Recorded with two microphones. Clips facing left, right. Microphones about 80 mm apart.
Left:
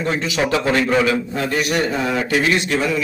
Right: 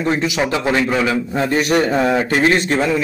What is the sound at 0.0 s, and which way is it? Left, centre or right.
A man's voice, centre.